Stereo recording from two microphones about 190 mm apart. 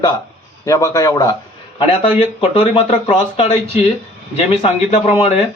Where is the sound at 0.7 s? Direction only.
15° left (ahead or behind).